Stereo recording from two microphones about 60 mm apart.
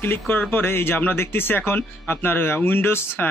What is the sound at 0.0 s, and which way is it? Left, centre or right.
Speech, left.